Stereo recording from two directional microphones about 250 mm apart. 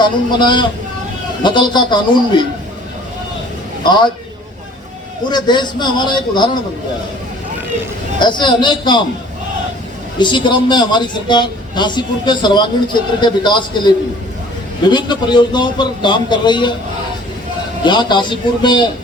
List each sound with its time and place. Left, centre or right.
0.0 s a man's voice: centre
3.9 s a man's voice: centre
5.3 s a man's voice: centre
8.2 s a man's voice: centre
10.2 s a man's voice: centre
14.8 s a man's voice: centre
17.8 s a man's voice: centre